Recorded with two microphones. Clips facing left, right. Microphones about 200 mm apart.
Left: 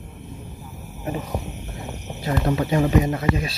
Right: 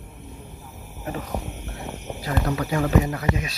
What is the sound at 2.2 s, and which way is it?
Speech, 25° left (ahead or behind).